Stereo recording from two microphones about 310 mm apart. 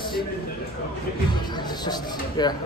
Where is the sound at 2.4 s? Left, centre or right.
Centre.